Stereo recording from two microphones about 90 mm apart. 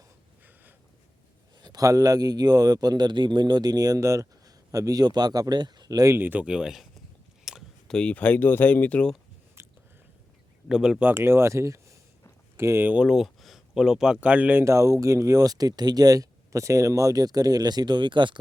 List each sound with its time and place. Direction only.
1.6 s speech: 45° right (ahead or behind)
6.1 s speech: 20° right (ahead or behind)
7.5 s a sound: 5° right (ahead or behind)
7.9 s speech: 10° left (ahead or behind)
9.6 s biting: 30° right (ahead or behind)
10.7 s speech: 5° right (ahead or behind)
11.0 s speech: 25° right (ahead or behind)
12.9 s speech: 5° right (ahead or behind)
14.6 s speech: 35° right (ahead or behind); by 18.3 s 60° right (ahead or behind)